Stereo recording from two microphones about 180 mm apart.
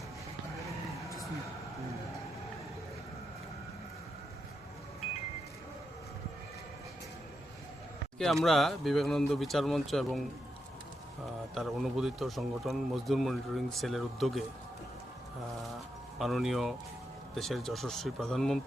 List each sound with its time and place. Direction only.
8.2 s speech: centre (ahead or behind)
11.5 s speech: centre (ahead or behind)
16.1 s speech: centre (ahead or behind)